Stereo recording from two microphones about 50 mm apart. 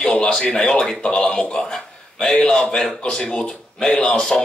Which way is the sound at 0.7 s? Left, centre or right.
Centre.